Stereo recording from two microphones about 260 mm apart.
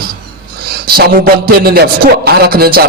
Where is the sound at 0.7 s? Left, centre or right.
Right.